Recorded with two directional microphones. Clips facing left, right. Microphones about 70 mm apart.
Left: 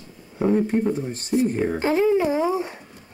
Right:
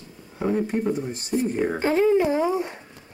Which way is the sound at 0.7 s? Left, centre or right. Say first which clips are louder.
Left 2 dB; centre.